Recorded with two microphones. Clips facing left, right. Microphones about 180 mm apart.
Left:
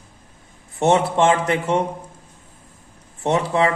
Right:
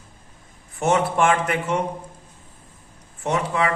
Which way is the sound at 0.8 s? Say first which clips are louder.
Left 3 dB; 30° left (ahead or behind).